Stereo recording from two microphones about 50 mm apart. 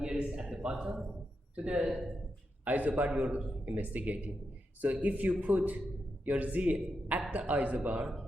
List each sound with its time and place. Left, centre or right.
0.0 s a sound: right
1.5 s speech: centre
2.6 s a man's voice: right